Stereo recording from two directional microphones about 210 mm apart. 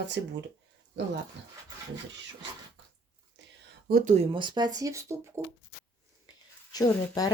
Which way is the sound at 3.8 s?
40° right (ahead or behind).